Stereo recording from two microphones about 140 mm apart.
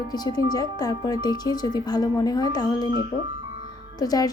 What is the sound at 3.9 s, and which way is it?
Speech, 25° left (ahead or behind).